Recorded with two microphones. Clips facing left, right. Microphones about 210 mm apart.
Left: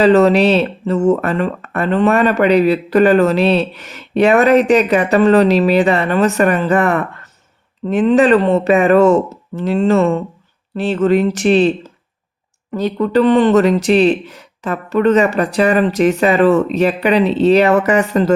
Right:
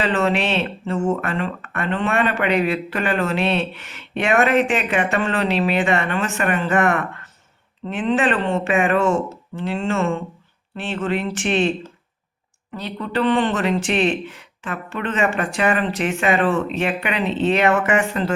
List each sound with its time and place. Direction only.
0.0 s speech: 40° left (ahead or behind)
12.7 s speech: 45° left (ahead or behind)